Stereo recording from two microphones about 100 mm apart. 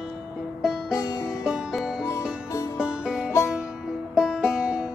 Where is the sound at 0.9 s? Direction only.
35° left (ahead or behind).